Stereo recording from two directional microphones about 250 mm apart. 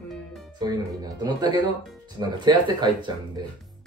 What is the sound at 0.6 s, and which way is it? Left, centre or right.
Speech, centre.